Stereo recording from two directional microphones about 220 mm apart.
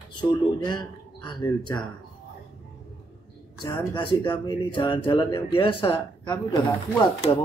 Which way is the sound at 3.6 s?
20° left (ahead or behind).